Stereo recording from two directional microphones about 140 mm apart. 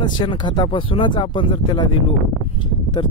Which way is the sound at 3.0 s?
35° left (ahead or behind).